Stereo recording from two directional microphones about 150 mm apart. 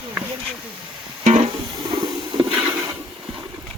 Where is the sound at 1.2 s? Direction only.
50° right (ahead or behind).